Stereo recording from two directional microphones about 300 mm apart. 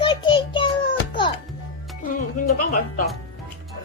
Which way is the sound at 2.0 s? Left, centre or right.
Left.